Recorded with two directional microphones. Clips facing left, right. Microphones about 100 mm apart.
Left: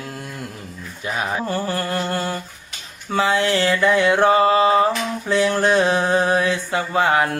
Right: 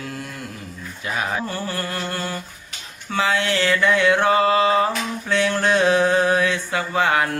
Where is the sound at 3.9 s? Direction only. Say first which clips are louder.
Left 1 dB; 15° left (ahead or behind).